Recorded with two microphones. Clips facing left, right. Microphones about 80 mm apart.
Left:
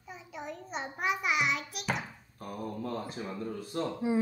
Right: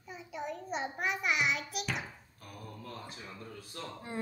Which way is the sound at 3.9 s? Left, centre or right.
Centre.